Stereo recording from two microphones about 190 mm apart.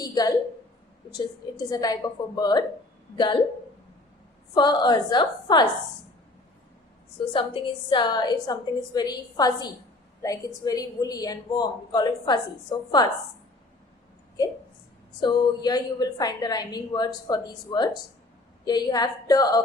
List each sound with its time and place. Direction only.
0.0 s a sound: 20° left (ahead or behind)
1.1 s a woman's voice: 20° left (ahead or behind)
4.5 s a woman's voice: 25° left (ahead or behind)
7.3 s a woman's voice: 25° left (ahead or behind)
14.4 s a woman's voice: 20° left (ahead or behind)